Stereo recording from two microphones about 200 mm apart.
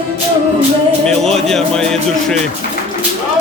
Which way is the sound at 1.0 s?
Centre (ahead or behind).